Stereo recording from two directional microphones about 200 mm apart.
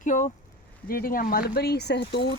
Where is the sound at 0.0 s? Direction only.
40° left (ahead or behind).